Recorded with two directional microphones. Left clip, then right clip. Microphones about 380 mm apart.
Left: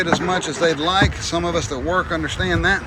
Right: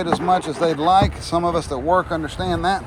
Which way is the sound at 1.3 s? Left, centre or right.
Centre.